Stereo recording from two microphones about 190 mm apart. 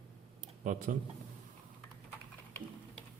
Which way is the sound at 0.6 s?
40° right (ahead or behind).